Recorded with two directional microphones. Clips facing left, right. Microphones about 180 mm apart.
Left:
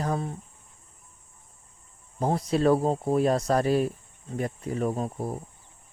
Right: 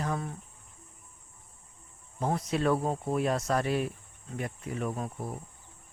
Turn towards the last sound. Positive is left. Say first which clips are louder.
# left 6 dB
turn(degrees=35)  # may be behind; listen again after turning